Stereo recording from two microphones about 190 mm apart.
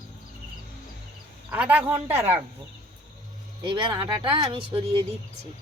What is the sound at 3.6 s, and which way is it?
Speech, 25° right (ahead or behind).